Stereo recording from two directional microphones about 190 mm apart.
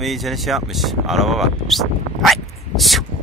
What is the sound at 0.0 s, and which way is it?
Speech, centre (ahead or behind).